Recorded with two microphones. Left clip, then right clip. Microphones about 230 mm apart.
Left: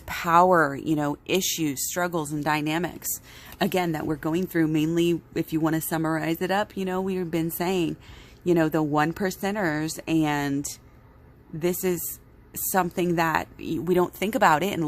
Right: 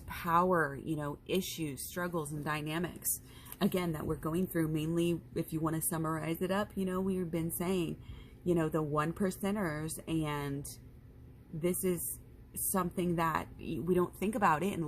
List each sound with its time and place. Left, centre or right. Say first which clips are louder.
0.1 s speech: left 11 dB; left